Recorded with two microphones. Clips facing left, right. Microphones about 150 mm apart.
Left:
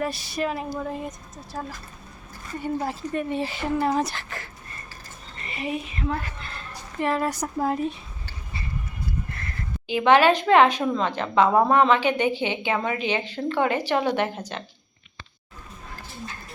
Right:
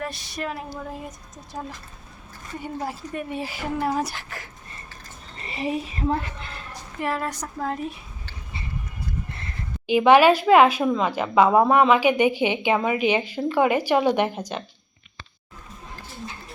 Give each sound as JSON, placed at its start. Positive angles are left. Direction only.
{"t": 0.0, "sound": "a woman's voice", "side_deg": 5}
{"t": 1.5, "sound": "speech", "side_deg": -15}
{"t": 5.5, "sound": "a woman's voice", "side_deg": -30}
{"t": 7.0, "sound": "a woman's voice", "side_deg": 0}
{"t": 9.8, "sound": "speech", "side_deg": -15}